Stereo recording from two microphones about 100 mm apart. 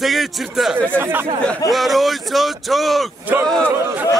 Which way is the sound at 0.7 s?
20° right (ahead or behind).